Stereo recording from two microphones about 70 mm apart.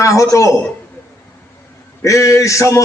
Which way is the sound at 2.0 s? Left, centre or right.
Left.